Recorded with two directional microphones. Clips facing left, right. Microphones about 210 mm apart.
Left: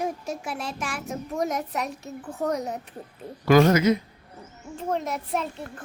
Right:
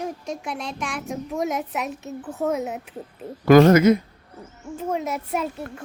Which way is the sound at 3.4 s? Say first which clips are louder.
Right 5 dB; 50° right (ahead or behind).